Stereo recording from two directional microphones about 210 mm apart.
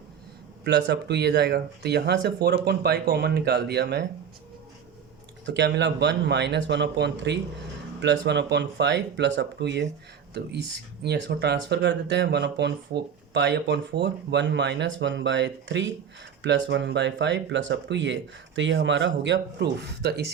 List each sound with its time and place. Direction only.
0.6 s speech: 55° right (ahead or behind)
5.5 s speech: 55° right (ahead or behind)